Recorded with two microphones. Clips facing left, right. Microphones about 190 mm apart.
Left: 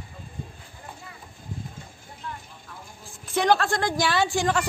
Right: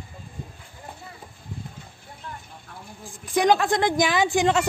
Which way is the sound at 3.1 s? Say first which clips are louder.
Right 2 dB; 15° right (ahead or behind).